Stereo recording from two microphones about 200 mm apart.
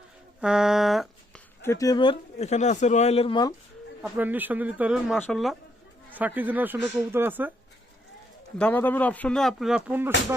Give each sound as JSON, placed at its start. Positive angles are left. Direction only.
{"t": 0.4, "sound": "speech", "side_deg": 0}
{"t": 1.6, "sound": "speech", "side_deg": 15}
{"t": 4.0, "sound": "speech", "side_deg": -10}
{"t": 8.5, "sound": "speech", "side_deg": 10}